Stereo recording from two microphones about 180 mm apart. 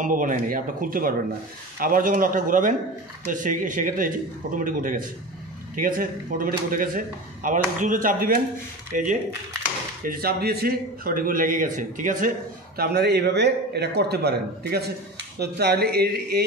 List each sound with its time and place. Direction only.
0.0 s speech: 45° right (ahead or behind)
10.0 s speech: 60° right (ahead or behind)
12.7 s a man's voice: 60° right (ahead or behind)